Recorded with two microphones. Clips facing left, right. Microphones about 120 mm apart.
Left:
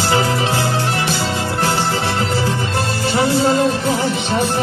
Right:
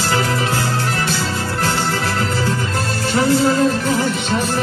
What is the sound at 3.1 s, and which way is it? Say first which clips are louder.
Music: even; 20° left (ahead or behind).